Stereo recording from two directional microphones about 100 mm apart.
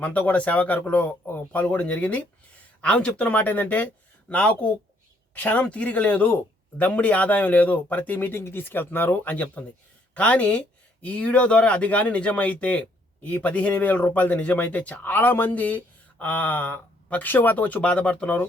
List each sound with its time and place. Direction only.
0.0 s speech: 15° left (ahead or behind)